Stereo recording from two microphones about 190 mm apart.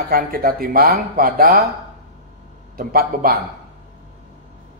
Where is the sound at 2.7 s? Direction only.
50° right (ahead or behind).